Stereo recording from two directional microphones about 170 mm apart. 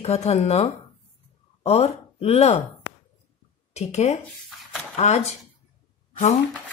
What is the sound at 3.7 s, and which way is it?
A woman's voice, 40° left (ahead or behind).